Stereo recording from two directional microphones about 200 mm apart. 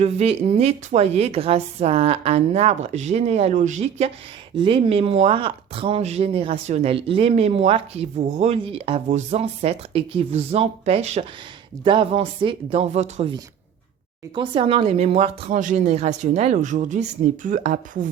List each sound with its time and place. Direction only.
0.0 s speech: 35° right (ahead or behind)
14.3 s speech: 25° right (ahead or behind)